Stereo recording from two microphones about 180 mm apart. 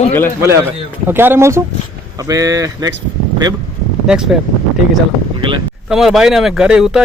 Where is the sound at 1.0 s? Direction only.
10° right (ahead or behind).